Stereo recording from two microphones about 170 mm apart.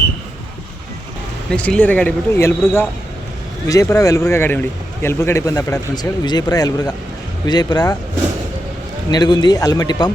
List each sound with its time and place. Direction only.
1.5 s speech: 5° left (ahead or behind); by 7.9 s 25° left (ahead or behind)
9.1 s speech: 25° left (ahead or behind)